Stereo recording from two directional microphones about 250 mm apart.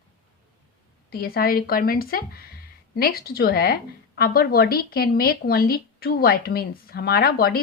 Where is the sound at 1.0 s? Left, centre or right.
Left.